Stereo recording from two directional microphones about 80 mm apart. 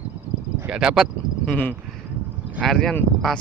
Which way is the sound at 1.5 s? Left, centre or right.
Centre.